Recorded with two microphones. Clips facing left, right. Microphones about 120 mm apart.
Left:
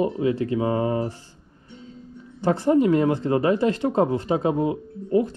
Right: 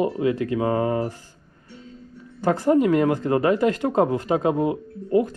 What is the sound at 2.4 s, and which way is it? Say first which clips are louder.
Speech: even; 45° right (ahead or behind).